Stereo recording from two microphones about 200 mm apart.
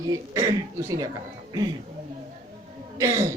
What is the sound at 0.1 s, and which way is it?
Speech, 15° right (ahead or behind).